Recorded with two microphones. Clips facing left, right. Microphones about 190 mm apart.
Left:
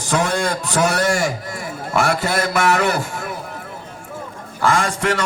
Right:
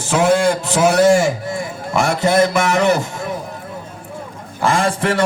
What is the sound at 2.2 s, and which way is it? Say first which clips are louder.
Speech: right 4 dB; 25° right (ahead or behind).